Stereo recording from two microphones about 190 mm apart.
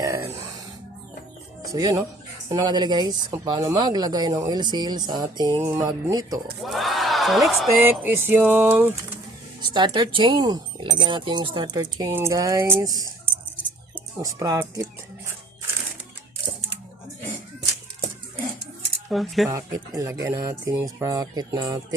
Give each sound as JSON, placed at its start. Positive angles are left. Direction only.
{"t": 0.0, "sound": "a sound", "side_deg": -15}
{"t": 1.7, "sound": "speech", "side_deg": -20}
{"t": 6.6, "sound": "speech", "side_deg": 0}
{"t": 7.9, "sound": "speech", "side_deg": -10}
{"t": 9.6, "sound": "speech", "side_deg": -25}
{"t": 19.0, "sound": "speech", "side_deg": 0}
{"t": 19.5, "sound": "speech", "side_deg": -15}